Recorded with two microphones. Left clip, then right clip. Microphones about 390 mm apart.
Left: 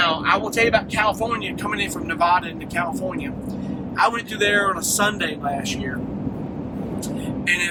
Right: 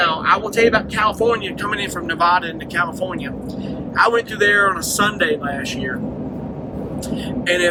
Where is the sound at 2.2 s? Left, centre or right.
Centre.